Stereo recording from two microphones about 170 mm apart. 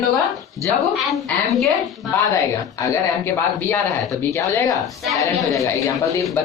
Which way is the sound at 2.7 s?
20° left (ahead or behind).